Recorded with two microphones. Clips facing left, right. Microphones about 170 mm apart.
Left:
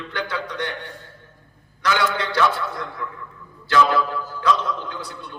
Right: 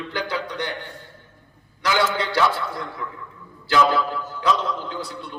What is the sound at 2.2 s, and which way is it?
Speech, 25° right (ahead or behind).